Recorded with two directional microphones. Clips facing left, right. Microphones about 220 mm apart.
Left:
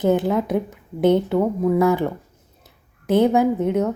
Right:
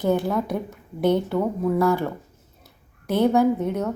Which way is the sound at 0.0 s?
20° left (ahead or behind).